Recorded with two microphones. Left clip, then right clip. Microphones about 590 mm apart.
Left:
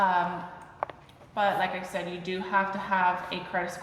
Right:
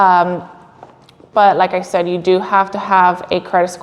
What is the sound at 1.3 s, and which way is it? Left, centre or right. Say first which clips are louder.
A woman's voice: right 16 dB; right.